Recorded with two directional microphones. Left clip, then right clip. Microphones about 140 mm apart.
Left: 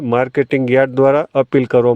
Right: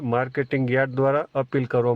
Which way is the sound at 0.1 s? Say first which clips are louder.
Left 9 dB; 55° left (ahead or behind).